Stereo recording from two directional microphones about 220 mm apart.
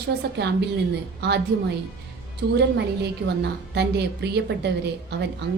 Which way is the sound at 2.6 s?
50° right (ahead or behind).